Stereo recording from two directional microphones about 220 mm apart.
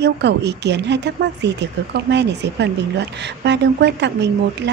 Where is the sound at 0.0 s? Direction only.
50° right (ahead or behind).